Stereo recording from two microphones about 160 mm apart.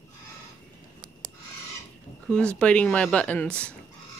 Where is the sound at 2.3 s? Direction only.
5° left (ahead or behind).